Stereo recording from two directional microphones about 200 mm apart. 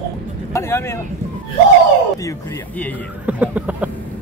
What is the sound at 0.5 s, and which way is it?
Speech, 15° left (ahead or behind).